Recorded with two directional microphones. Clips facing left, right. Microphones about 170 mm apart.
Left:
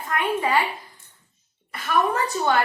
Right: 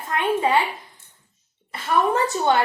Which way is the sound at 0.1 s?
25° right (ahead or behind).